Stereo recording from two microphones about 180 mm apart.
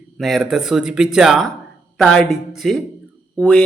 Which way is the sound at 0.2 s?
Centre (ahead or behind).